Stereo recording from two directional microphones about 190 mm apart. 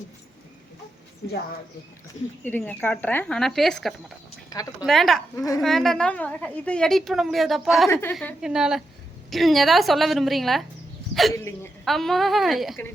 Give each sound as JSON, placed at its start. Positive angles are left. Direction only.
{"t": 2.4, "sound": "a woman's voice", "side_deg": 10}
{"t": 4.4, "sound": "speech", "side_deg": 20}
{"t": 4.9, "sound": "a woman's voice", "side_deg": 0}
{"t": 8.4, "sound": "a woman's voice", "side_deg": -5}